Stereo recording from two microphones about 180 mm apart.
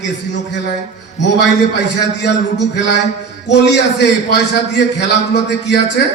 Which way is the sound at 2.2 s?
70° left (ahead or behind).